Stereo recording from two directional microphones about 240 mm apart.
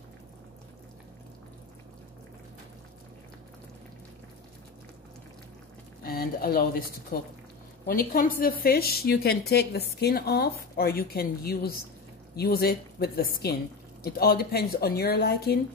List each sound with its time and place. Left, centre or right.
6.0 s a woman's voice: left